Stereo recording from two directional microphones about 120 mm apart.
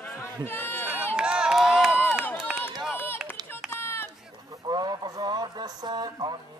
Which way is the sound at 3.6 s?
20° left (ahead or behind).